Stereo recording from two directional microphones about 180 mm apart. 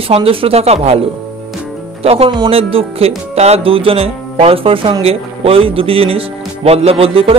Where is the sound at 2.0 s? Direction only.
35° right (ahead or behind).